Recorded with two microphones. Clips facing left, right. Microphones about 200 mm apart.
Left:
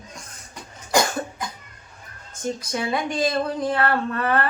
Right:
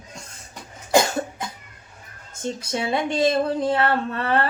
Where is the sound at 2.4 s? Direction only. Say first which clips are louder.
Even; 25° right (ahead or behind).